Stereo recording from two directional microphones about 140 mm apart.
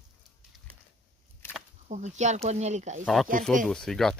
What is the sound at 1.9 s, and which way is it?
Speech, 55° right (ahead or behind).